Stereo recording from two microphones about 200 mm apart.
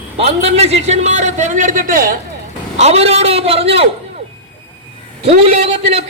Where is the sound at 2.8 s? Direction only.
30° right (ahead or behind).